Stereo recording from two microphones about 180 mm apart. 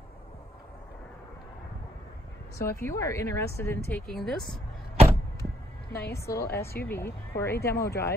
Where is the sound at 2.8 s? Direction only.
15° left (ahead or behind).